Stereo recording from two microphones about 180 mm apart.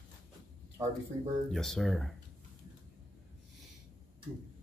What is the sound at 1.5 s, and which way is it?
Speech, centre (ahead or behind).